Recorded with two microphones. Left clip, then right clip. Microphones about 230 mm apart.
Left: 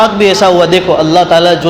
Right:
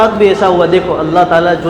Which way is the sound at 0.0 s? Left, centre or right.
Left.